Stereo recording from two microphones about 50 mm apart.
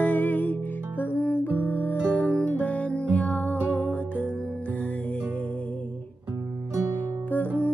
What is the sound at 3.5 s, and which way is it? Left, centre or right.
Music, right.